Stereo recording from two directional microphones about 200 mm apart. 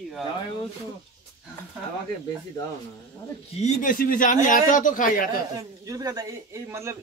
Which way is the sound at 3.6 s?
40° left (ahead or behind).